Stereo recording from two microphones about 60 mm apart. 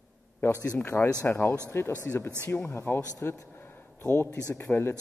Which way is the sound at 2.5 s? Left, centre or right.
Left.